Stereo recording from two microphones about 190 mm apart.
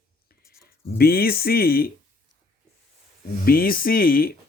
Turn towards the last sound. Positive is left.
turn(degrees=50)  # may be behind; listen again after turning